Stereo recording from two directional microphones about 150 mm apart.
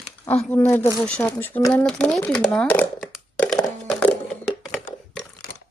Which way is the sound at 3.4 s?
5° left (ahead or behind).